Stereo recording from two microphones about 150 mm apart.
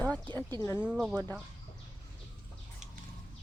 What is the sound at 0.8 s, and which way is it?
Speech, 5° right (ahead or behind).